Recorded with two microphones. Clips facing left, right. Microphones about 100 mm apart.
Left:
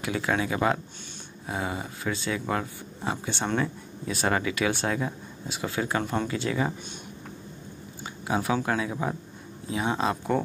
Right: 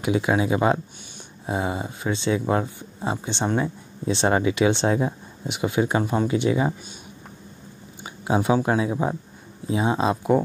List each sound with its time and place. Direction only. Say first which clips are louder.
0.0 s speech: right 6 dB; 20° right (ahead or behind)
8.0 s speech: right 5 dB; 20° right (ahead or behind)